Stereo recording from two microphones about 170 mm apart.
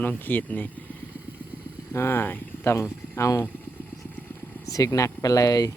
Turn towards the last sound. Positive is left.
turn(degrees=20)  # may be behind; listen again after turning